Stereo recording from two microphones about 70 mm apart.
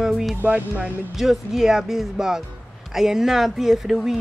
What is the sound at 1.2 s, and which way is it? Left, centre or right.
Speech, centre.